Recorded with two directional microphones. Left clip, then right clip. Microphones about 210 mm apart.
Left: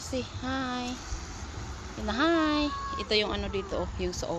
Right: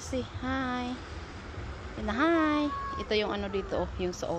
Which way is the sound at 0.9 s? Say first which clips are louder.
Left 1 dB; 45° left (ahead or behind).